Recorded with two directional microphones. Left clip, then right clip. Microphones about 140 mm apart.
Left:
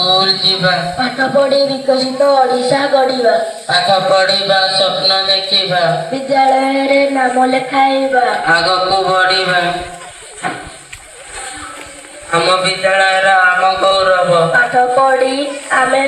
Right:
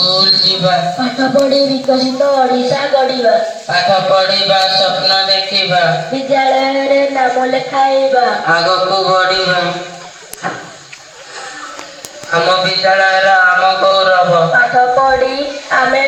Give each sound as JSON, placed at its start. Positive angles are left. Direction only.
{"t": 0.0, "sound": "a sound", "side_deg": 15}
{"t": 0.5, "sound": "speech", "side_deg": 0}
{"t": 4.4, "sound": "a man's voice", "side_deg": 45}
{"t": 5.6, "sound": "speech", "side_deg": 20}
{"t": 12.3, "sound": "a man's voice", "side_deg": 40}